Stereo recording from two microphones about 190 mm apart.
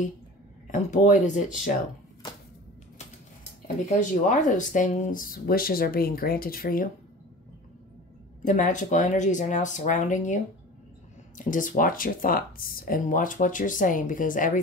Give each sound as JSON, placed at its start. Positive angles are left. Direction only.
{"t": 0.7, "sound": "speech", "side_deg": 40}
{"t": 3.6, "sound": "speech", "side_deg": 40}
{"t": 8.5, "sound": "speech", "side_deg": 40}